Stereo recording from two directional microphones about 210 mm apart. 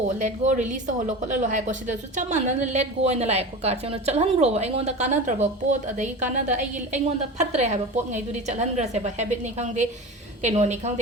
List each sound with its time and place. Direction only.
0.2 s speech: 35° right (ahead or behind)